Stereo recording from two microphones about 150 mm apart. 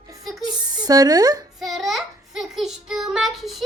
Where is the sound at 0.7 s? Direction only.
25° right (ahead or behind).